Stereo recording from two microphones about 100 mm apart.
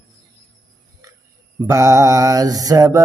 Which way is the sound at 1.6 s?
35° right (ahead or behind).